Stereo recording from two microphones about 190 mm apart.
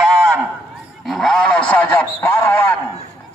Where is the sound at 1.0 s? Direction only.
Centre (ahead or behind).